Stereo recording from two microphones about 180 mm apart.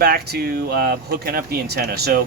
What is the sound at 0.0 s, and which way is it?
Speech, 55° right (ahead or behind).